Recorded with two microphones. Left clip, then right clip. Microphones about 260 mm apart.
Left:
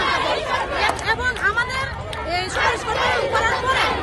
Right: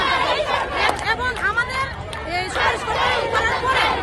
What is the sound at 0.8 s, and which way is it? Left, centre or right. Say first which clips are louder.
Chatter: even; centre.